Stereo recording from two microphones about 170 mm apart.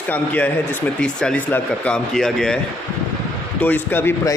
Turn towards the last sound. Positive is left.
turn(degrees=15)  # may be behind; listen again after turning